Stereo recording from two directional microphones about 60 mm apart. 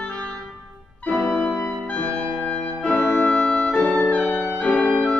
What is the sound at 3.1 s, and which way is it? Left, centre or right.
Music, centre.